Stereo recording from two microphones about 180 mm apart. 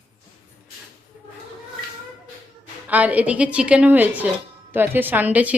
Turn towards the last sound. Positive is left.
turn(degrees=-10)  # may be behind; listen again after turning